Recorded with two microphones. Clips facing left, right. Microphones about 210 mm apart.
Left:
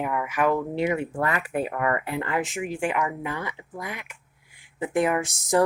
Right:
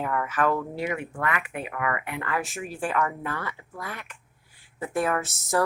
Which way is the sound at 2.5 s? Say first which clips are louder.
Left 2 dB; 15° left (ahead or behind).